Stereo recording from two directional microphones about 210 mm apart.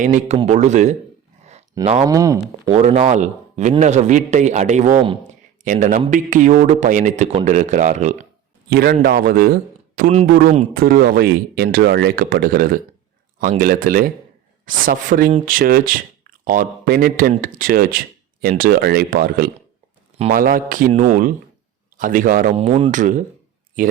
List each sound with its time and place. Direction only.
0.0 s speech: 35° right (ahead or behind)
2.0 s speech: 15° right (ahead or behind)
2.6 s speech: 30° right (ahead or behind)
8.7 s speech: 45° right (ahead or behind); by 10.8 s 30° right (ahead or behind)
10.8 s speech: 45° right (ahead or behind)
22.5 s speech: 30° right (ahead or behind)